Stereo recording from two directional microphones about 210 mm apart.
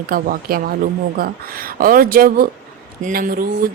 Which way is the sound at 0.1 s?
45° right (ahead or behind).